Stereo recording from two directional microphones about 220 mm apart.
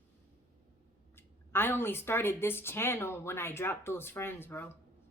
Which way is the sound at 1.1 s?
10° left (ahead or behind).